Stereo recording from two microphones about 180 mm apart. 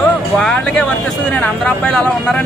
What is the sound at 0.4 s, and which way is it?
Speech, 5° left (ahead or behind).